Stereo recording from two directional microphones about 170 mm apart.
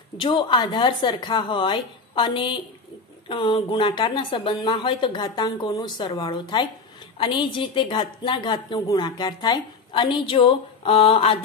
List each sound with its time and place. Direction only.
0.2 s a woman's voice: 30° left (ahead or behind)